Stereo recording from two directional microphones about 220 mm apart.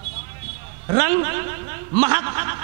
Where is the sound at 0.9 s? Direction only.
15° right (ahead or behind).